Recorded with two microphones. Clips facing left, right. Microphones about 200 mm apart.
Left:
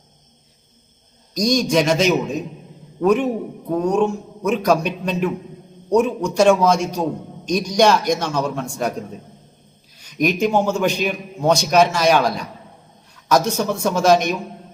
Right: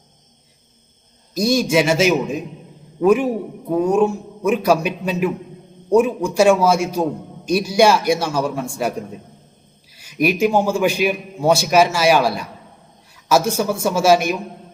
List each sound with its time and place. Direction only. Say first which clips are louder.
1.3 s a man's voice: right 1 dB; 5° right (ahead or behind)